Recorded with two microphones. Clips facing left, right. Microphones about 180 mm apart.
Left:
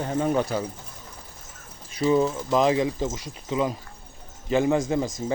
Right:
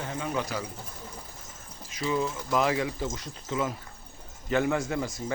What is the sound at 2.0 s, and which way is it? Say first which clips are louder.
Speech: left 8 dB; 35° left (ahead or behind).